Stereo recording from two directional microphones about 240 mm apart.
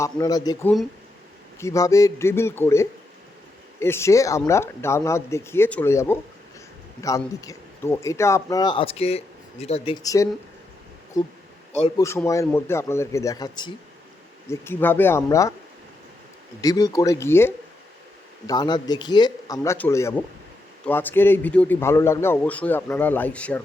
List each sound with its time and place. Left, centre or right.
0.0 s speech: centre
11.9 s speech: centre
16.6 s speech: centre